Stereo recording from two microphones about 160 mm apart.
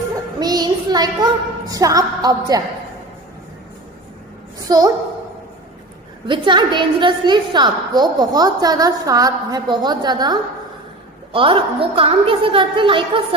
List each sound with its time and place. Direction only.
0.4 s a woman's voice: 25° right (ahead or behind)
4.6 s a woman's voice: 25° right (ahead or behind)
6.2 s a woman's voice: 30° right (ahead or behind)